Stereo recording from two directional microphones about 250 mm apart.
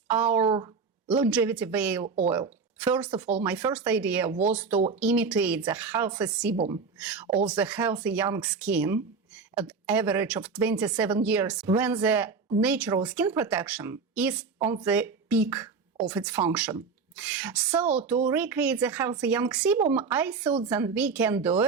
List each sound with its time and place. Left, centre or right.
0.1 s speech: centre
0.4 s speech: right
1.0 s speech: centre
16.3 s speech: centre
16.6 s speech: centre